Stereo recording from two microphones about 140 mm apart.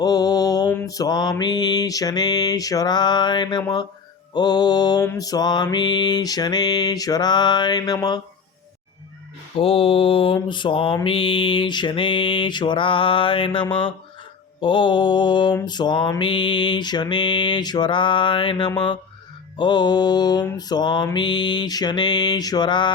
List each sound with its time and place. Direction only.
0.0 s mantra: 30° left (ahead or behind)
9.6 s mantra: 40° left (ahead or behind)